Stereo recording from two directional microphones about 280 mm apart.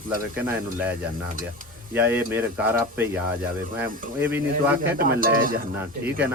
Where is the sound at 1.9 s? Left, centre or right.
Centre.